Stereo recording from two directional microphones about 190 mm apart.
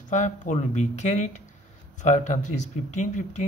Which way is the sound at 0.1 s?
40° left (ahead or behind).